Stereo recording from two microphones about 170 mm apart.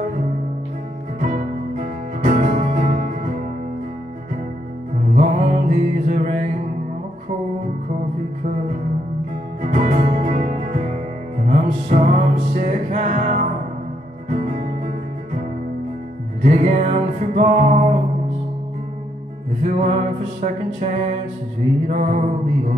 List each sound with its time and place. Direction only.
1.2 s music: 50° right (ahead or behind)
5.1 s music: 45° right (ahead or behind)
9.6 s music: 45° right (ahead or behind)
16.4 s music: 45° right (ahead or behind)
19.6 s music: 40° right (ahead or behind)
21.8 s mantra: 40° right (ahead or behind)